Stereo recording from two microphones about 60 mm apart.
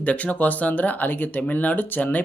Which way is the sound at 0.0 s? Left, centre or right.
Left.